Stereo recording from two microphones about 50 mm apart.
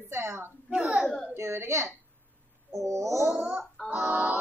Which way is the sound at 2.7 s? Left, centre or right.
Right.